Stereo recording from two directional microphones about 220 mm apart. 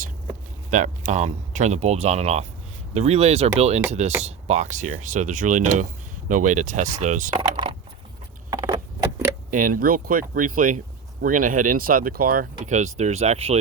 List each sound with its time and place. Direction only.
0.7 s speech: 35° right (ahead or behind)
8.4 s a sound: 15° right (ahead or behind)
9.5 s speech: 35° right (ahead or behind)